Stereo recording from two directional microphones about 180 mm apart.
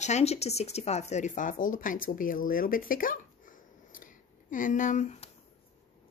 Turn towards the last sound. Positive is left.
turn(degrees=40)  # may be behind; listen again after turning